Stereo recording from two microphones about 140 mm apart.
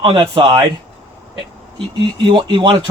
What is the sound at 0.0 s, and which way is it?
Speech, 35° right (ahead or behind).